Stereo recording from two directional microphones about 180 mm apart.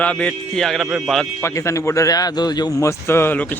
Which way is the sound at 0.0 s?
5° left (ahead or behind).